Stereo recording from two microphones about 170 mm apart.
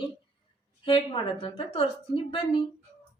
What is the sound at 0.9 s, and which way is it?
Speech, 30° left (ahead or behind).